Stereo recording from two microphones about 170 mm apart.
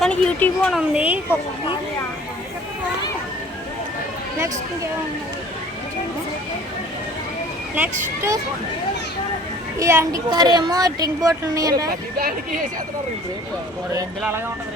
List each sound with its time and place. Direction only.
0.0 s a sound: 10° left (ahead or behind)
0.7 s speech: 5° right (ahead or behind)
4.4 s speech: 20° right (ahead or behind)
7.8 s speech: 15° right (ahead or behind)
9.7 s speech: 15° right (ahead or behind)